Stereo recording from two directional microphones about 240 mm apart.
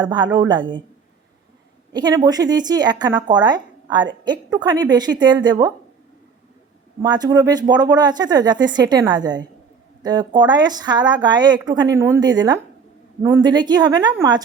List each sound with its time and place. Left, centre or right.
0.0 s speech: centre
1.9 s speech: centre
7.0 s speech: centre